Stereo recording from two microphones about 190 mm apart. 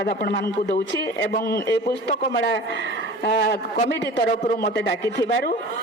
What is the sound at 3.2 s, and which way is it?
A man's voice, 55° left (ahead or behind).